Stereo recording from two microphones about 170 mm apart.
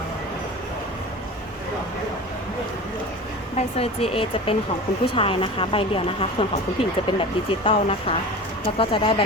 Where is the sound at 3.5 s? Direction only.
35° left (ahead or behind).